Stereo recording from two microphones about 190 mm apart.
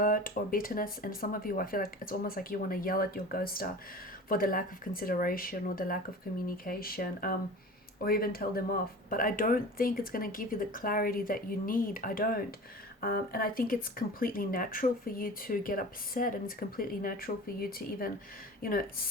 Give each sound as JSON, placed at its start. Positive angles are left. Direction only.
{"t": 0.0, "sound": "speech", "side_deg": 50}